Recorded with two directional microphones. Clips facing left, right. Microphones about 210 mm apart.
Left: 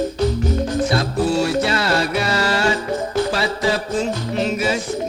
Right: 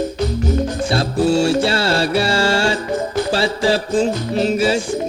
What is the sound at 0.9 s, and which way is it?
Music, 30° right (ahead or behind).